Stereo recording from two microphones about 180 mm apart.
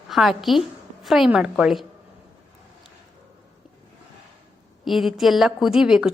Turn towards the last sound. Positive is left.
turn(degrees=-5)  # may be behind; listen again after turning